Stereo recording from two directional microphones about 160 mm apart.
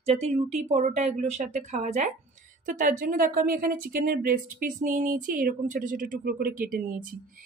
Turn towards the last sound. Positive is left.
turn(degrees=-60)  # may be behind; listen again after turning